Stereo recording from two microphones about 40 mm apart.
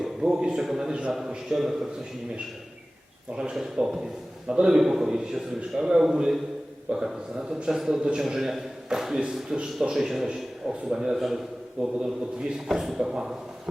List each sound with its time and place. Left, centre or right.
0.0 s a sound: centre
0.6 s a man's voice: centre
0.9 s a man's voice: right
1.5 s a man's voice: centre
3.8 s a man's voice: centre
4.4 s a man's voice: right
4.7 s a man's voice: centre
9.5 s a man's voice: right
12.5 s a man's voice: centre